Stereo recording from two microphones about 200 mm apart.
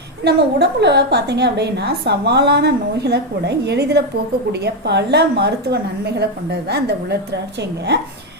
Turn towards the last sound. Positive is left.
turn(degrees=-60)  # may be behind; listen again after turning